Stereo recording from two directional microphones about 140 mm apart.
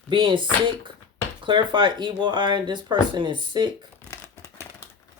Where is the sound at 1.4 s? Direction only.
35° right (ahead or behind).